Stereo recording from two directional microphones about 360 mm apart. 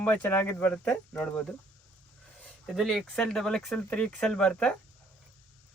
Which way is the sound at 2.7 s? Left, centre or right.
Centre.